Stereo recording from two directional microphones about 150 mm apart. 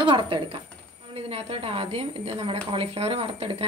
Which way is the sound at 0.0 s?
35° right (ahead or behind).